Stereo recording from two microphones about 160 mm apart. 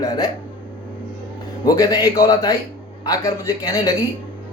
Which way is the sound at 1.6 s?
25° left (ahead or behind).